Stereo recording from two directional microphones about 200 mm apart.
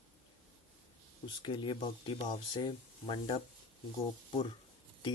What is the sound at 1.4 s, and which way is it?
Speech, 25° left (ahead or behind).